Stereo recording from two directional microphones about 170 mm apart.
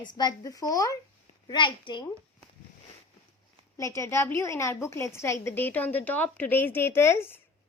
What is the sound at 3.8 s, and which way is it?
A woman's voice, 20° left (ahead or behind).